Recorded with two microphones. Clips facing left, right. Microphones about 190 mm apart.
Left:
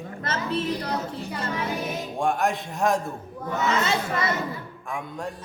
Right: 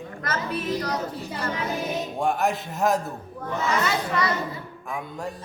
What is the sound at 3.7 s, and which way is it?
Speech, 25° left (ahead or behind).